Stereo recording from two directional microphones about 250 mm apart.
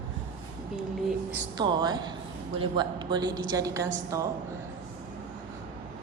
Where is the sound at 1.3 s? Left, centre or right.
Centre.